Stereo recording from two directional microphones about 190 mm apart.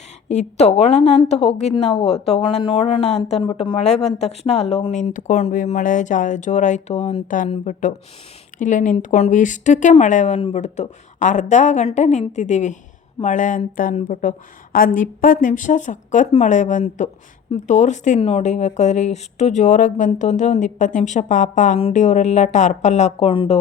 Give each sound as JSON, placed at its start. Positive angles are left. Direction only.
{"t": 0.3, "sound": "speech", "side_deg": 35}